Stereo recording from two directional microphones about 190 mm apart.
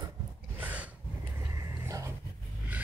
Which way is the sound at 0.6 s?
10° right (ahead or behind).